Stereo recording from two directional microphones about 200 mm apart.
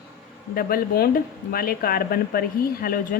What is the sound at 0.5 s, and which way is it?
A woman's voice, 50° left (ahead or behind).